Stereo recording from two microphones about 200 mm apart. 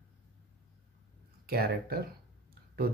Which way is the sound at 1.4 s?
50° right (ahead or behind).